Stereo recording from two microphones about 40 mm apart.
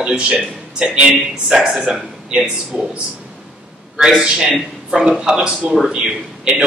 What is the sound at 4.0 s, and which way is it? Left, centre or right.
A man's voice, centre.